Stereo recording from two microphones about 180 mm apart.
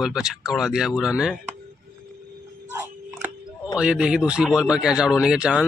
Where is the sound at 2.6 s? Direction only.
10° right (ahead or behind).